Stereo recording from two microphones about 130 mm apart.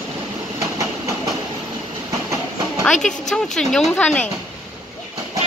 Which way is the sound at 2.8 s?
5° left (ahead or behind).